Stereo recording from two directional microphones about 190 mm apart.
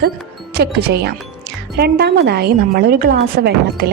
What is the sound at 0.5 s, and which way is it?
Speech, 60° right (ahead or behind).